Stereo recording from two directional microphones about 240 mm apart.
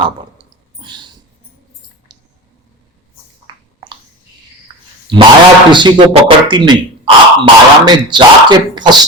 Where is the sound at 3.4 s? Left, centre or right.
Centre.